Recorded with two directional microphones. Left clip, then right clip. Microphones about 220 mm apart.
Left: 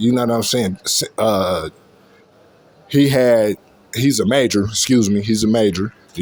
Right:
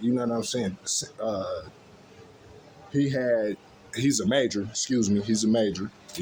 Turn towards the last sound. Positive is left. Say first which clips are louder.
# left 9 dB
turn(degrees=35)  # may be behind; listen again after turning